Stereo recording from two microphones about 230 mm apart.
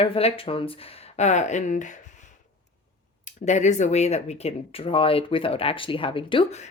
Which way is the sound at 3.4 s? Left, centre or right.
Left.